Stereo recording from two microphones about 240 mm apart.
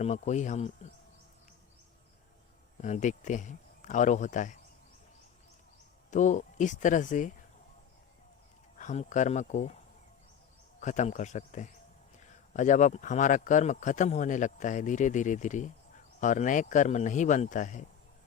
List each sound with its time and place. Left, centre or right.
0.0 s speech: left
2.8 s speech: left
6.1 s speech: left
8.8 s speech: left
10.8 s speech: left